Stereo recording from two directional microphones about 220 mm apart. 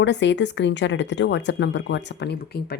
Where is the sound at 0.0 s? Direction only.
55° left (ahead or behind).